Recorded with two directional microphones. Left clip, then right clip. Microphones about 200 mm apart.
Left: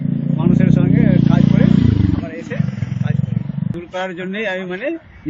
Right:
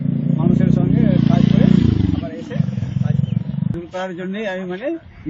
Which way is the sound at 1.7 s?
50° right (ahead or behind).